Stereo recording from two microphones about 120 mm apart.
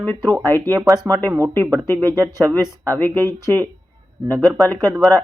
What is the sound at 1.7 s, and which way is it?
Speech, 20° left (ahead or behind).